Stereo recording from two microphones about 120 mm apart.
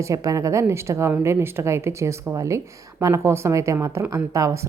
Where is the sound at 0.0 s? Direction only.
30° right (ahead or behind).